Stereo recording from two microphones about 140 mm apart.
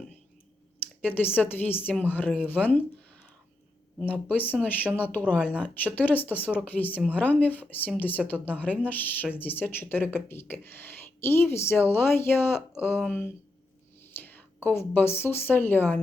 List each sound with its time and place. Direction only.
1.0 s speech: 15° left (ahead or behind)
4.1 s a woman's voice: 10° left (ahead or behind)